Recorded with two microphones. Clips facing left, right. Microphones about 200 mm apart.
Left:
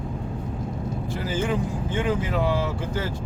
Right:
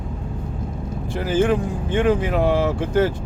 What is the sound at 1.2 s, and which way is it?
Speech, 60° right (ahead or behind).